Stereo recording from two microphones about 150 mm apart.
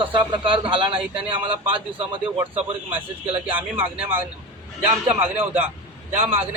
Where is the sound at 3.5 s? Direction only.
10° right (ahead or behind).